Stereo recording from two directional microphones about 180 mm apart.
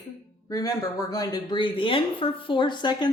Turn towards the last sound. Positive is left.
turn(degrees=25)  # may be behind; listen again after turning